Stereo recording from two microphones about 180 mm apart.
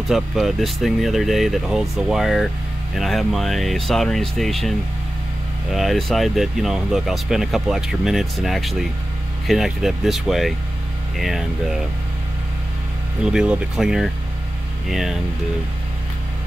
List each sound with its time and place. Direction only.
0.1 s speech: centre (ahead or behind)
13.2 s speech: 5° right (ahead or behind)